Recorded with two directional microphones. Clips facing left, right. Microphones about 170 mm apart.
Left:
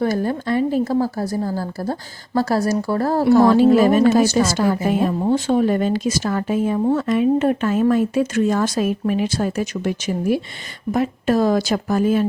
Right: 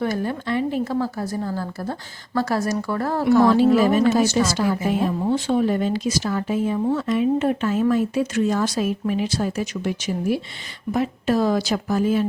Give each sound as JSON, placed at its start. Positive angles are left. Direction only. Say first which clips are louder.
{"t": 0.0, "sound": "a woman's voice", "louder": "left 4 dB", "side_deg": 40}
{"t": 3.5, "sound": "speech", "louder": "left 3 dB", "side_deg": 50}